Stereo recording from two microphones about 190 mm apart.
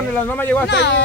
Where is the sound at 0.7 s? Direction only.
65° left (ahead or behind).